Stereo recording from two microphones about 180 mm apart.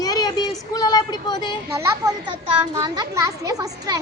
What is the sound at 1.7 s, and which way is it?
A child's voice, 15° right (ahead or behind).